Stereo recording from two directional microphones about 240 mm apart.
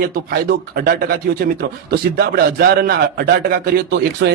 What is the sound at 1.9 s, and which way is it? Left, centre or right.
Speech, right.